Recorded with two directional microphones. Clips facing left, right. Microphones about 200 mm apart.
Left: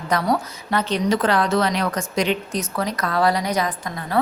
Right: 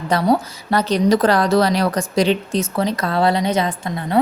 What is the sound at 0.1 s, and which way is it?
A woman's voice, 30° right (ahead or behind).